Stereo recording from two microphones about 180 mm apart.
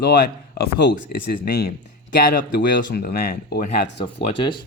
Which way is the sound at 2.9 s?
65° left (ahead or behind).